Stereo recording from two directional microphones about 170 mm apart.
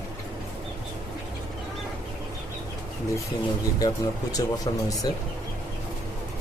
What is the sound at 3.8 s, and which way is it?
Speech, 20° left (ahead or behind).